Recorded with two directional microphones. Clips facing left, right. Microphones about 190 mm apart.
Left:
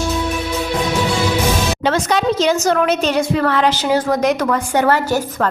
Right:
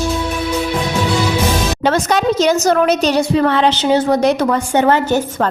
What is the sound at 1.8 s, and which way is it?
A woman's voice, 45° right (ahead or behind).